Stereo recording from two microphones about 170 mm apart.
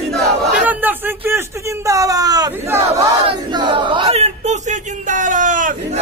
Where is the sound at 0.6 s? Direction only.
10° right (ahead or behind).